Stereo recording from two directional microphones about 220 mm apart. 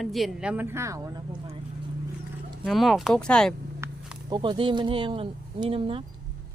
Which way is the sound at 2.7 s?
Centre (ahead or behind).